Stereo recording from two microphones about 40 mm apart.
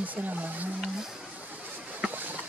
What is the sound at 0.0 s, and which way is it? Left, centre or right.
Speech, right.